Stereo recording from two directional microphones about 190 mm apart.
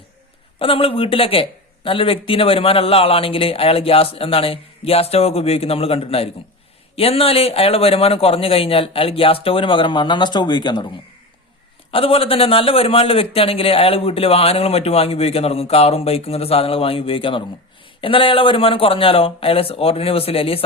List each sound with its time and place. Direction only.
0.6 s speech: 30° left (ahead or behind)
11.9 s speech: 30° left (ahead or behind)